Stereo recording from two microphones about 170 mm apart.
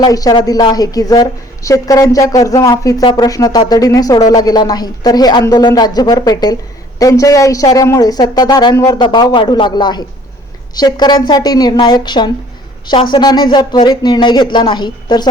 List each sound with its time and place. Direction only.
0.0 s a woman's voice: 20° left (ahead or behind)